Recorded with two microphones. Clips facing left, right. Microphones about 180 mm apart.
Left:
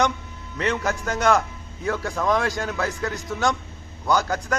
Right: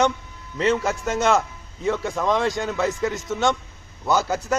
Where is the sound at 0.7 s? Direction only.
5° right (ahead or behind).